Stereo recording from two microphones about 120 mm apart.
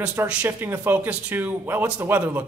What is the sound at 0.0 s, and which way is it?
Speech, 15° right (ahead or behind).